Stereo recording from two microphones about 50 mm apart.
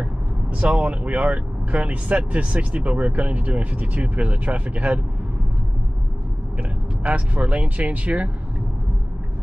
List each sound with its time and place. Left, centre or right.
0.0 s speech: right
7.0 s speech: right